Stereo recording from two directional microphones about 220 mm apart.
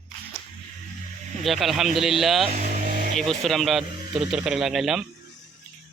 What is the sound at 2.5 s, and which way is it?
Vehicle, 35° right (ahead or behind).